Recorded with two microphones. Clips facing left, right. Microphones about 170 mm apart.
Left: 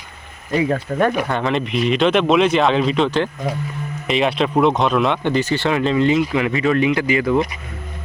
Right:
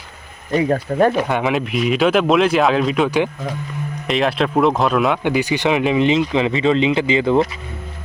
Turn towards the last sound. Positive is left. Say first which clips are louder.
# right 2 dB
turn(degrees=-25)  # may be behind; listen again after turning